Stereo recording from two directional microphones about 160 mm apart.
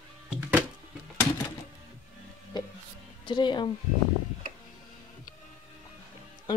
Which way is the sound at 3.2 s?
30° left (ahead or behind).